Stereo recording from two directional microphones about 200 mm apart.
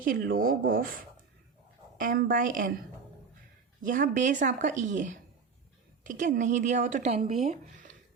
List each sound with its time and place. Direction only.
0.0 s speech: 45° right (ahead or behind)
3.8 s speech: 40° right (ahead or behind)